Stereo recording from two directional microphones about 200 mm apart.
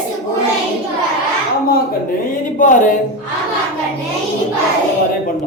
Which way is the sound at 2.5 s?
40° left (ahead or behind).